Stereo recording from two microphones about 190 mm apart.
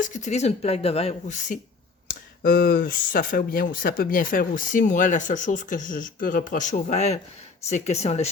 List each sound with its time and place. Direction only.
0.0 s speech: 40° left (ahead or behind)
2.0 s speech: 50° left (ahead or behind); by 8.3 s 35° left (ahead or behind)